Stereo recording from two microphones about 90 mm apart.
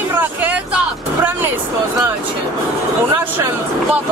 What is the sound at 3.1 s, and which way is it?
Speech, 20° right (ahead or behind).